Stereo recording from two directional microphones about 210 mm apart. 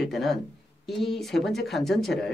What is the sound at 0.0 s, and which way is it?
Speech, centre (ahead or behind).